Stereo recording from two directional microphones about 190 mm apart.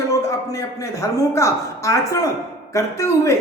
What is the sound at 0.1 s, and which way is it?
A man's voice, 15° left (ahead or behind).